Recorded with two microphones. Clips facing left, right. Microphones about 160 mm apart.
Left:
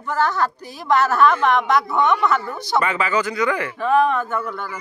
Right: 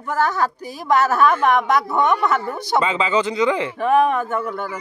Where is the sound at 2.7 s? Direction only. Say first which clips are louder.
Right 1 dB; 20° right (ahead or behind).